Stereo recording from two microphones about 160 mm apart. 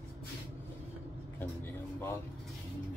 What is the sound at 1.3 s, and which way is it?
Speech, 15° left (ahead or behind).